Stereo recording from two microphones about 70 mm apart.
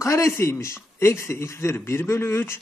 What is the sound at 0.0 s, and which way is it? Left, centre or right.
A man's voice, left.